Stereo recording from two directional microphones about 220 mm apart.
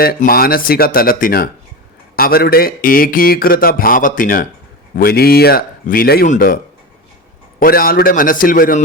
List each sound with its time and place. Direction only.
0.0 s a man's voice: 40° left (ahead or behind)
7.6 s a man's voice: 40° left (ahead or behind)